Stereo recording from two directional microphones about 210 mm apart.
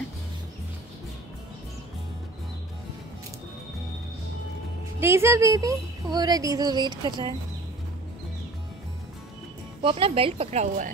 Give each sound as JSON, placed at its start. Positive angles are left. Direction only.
{"t": 5.0, "sound": "a woman's voice", "side_deg": -10}
{"t": 9.8, "sound": "speech", "side_deg": -25}